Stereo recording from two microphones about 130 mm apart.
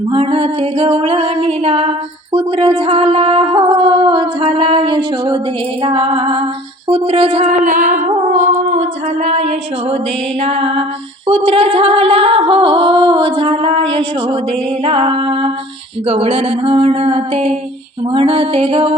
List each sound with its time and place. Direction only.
0.1 s music: 45° right (ahead or behind)
7.6 s music: 90° right; by 18.9 s 45° right (ahead or behind)